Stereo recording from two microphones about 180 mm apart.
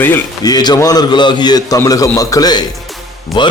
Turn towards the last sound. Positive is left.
turn(degrees=25)  # may be behind; listen again after turning